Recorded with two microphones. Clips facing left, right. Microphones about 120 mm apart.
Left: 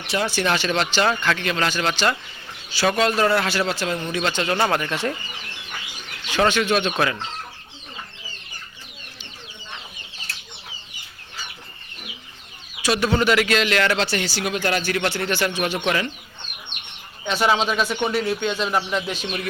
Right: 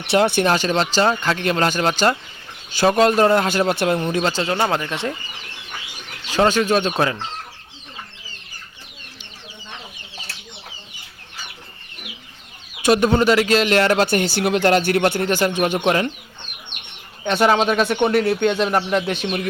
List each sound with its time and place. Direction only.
0.1 s speech: 60° right (ahead or behind)
0.4 s speech: 40° right (ahead or behind)
4.1 s speech: 35° right (ahead or behind)
4.4 s speech: 20° right (ahead or behind)
6.5 s speech: 35° right (ahead or behind)
12.8 s speech: 45° right (ahead or behind)
15.8 s speech: 35° right (ahead or behind)
17.2 s speech: 50° right (ahead or behind)